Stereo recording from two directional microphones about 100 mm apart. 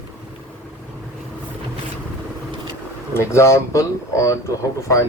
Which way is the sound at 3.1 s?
30° left (ahead or behind).